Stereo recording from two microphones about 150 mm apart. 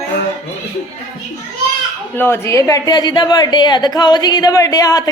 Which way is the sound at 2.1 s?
15° left (ahead or behind).